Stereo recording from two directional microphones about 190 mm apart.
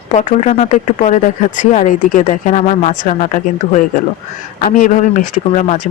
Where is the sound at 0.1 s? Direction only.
35° left (ahead or behind).